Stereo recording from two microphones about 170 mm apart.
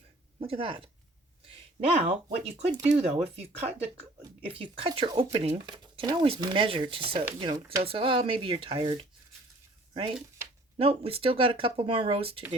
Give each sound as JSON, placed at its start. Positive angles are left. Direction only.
{"t": 0.3, "sound": "speech", "side_deg": -35}
{"t": 2.0, "sound": "speech", "side_deg": -35}